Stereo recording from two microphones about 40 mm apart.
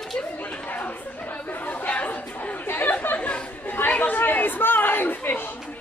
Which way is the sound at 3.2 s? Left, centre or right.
Left.